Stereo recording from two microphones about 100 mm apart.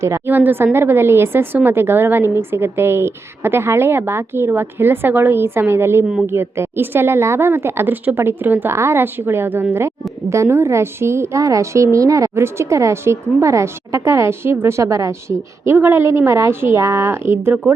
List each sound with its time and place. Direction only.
0.0 s a woman's voice: 25° right (ahead or behind)